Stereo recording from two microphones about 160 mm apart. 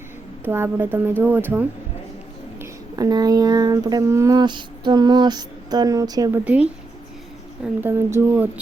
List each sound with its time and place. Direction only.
0.4 s speech: 15° right (ahead or behind)
2.6 s a sound: 25° right (ahead or behind)
6.4 s speech: 10° right (ahead or behind)